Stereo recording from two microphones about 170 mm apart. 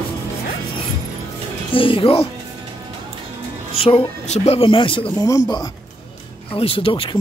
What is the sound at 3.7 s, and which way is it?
Speech, 35° left (ahead or behind).